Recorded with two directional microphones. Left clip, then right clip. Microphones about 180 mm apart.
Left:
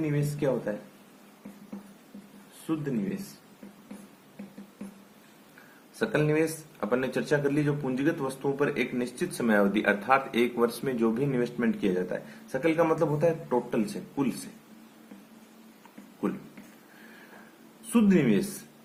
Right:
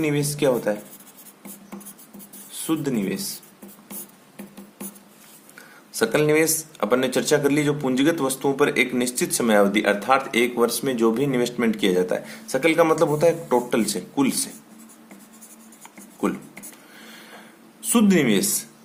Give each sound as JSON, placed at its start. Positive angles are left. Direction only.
{"t": 0.1, "sound": "speech", "side_deg": -40}
{"t": 2.7, "sound": "speech", "side_deg": -45}
{"t": 6.0, "sound": "speech", "side_deg": -35}
{"t": 17.9, "sound": "speech", "side_deg": -35}